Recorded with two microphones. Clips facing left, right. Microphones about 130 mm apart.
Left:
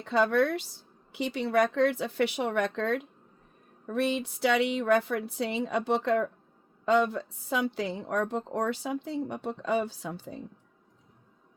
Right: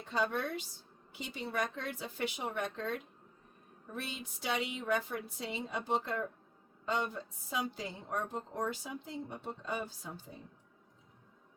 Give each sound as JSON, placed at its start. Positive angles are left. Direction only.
{"t": 0.0, "sound": "a woman's voice", "side_deg": 75}